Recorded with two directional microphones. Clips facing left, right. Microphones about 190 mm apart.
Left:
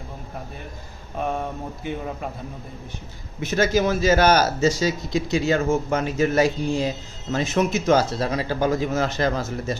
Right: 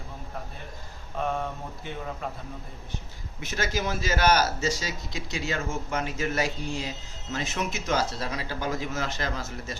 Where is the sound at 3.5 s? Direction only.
60° left (ahead or behind).